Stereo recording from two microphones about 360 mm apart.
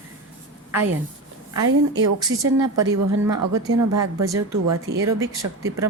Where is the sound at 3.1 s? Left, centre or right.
Right.